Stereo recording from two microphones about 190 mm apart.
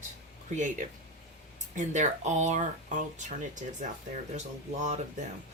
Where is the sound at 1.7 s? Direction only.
40° right (ahead or behind).